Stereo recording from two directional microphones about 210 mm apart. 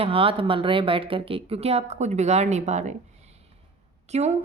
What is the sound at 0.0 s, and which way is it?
Speech, 25° right (ahead or behind).